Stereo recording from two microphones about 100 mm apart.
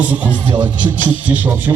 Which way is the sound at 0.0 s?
15° right (ahead or behind).